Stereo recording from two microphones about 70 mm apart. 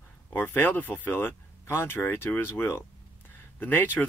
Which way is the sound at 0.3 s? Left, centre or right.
Left.